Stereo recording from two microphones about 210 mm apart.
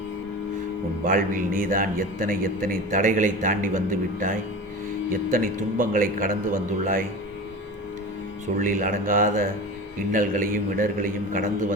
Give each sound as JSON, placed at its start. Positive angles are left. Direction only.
{"t": 1.0, "sound": "a man's voice", "side_deg": -40}
{"t": 8.6, "sound": "a man's voice", "side_deg": -40}